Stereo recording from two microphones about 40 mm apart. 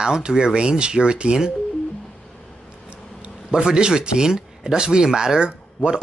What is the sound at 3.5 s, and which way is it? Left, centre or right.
Speech, centre.